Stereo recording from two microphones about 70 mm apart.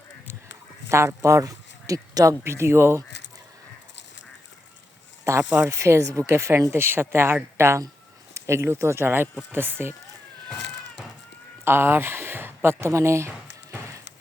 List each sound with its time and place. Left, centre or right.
0.9 s speech: right
2.4 s speech: right
5.3 s speech: right
11.6 s a sound: right